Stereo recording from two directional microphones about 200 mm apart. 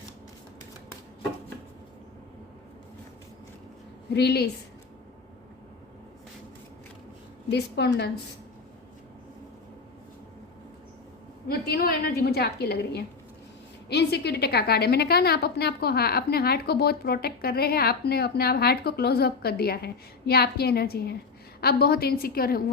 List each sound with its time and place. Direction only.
4.1 s a woman's voice: 55° left (ahead or behind)
7.5 s a woman's voice: 55° left (ahead or behind)
11.4 s a woman's voice: 50° left (ahead or behind)